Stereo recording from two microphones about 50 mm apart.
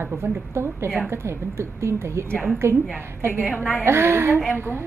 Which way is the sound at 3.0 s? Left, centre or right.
Right.